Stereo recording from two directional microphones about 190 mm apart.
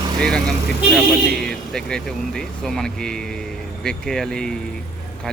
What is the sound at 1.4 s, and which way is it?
Vehicle, 5° left (ahead or behind).